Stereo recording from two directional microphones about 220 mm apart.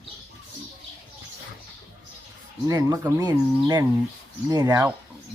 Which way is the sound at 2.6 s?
15° right (ahead or behind).